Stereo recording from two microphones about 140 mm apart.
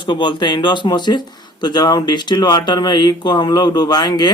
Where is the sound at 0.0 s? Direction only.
35° left (ahead or behind).